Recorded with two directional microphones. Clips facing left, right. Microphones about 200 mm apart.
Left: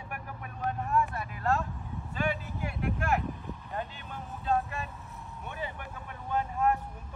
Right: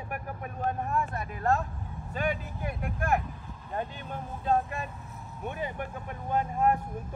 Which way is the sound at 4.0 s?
45° right (ahead or behind).